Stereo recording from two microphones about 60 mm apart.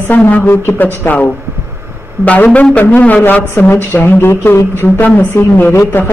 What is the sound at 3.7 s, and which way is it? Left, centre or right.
A woman's voice, left.